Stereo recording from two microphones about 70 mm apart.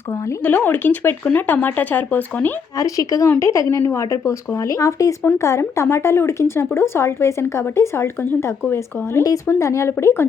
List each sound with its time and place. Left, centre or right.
0.4 s speech: left
2.7 s a woman's voice: left